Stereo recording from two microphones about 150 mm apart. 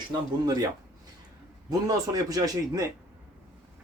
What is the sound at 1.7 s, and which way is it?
A man's voice, 25° right (ahead or behind).